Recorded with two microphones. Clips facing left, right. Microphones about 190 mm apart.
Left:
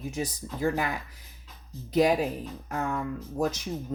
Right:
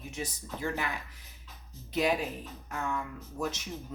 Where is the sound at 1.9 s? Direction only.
40° left (ahead or behind).